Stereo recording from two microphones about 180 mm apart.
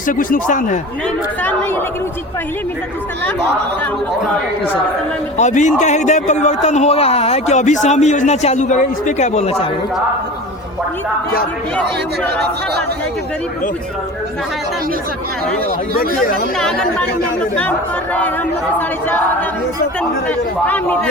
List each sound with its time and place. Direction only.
0.1 s speech: 50° left (ahead or behind)
1.4 s a man's voice: 10° left (ahead or behind)
5.4 s a man's voice: 40° left (ahead or behind)
16.0 s speech: 55° left (ahead or behind)
16.6 s a man's voice: centre (ahead or behind)